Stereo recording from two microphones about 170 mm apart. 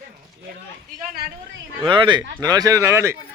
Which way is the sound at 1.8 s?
30° right (ahead or behind).